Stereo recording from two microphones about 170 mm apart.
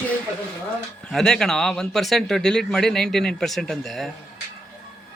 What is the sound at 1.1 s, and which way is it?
Speech, 5° left (ahead or behind).